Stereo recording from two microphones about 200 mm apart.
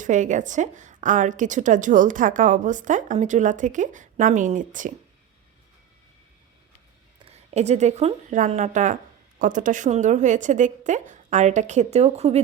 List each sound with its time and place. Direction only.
0.0 s a woman's voice: 40° right (ahead or behind)
7.3 s a woman's voice: 35° right (ahead or behind)